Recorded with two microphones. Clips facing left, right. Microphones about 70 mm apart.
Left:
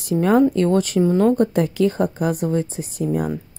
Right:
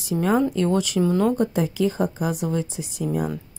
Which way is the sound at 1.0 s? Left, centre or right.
Left.